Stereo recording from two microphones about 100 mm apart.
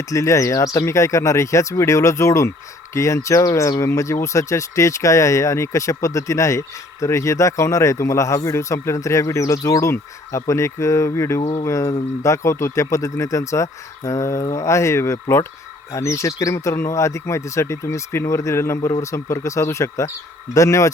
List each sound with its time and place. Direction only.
0.1 s speech: 30° left (ahead or behind)